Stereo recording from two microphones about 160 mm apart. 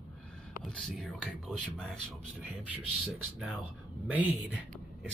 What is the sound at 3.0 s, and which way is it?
Speech, 5° left (ahead or behind).